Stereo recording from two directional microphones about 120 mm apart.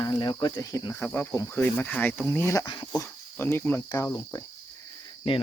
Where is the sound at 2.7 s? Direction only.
40° left (ahead or behind).